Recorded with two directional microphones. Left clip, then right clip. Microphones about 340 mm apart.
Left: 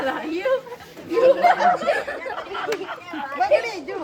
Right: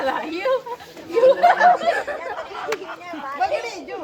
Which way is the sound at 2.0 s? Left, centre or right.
Right.